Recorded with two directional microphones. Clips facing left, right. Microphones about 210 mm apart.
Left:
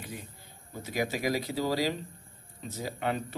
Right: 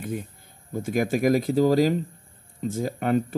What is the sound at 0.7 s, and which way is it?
Speech, 50° right (ahead or behind).